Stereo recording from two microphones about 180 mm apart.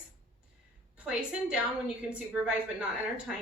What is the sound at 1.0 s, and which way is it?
A woman's voice, 5° right (ahead or behind).